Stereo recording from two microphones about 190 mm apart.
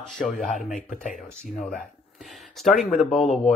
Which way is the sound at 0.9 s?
45° left (ahead or behind).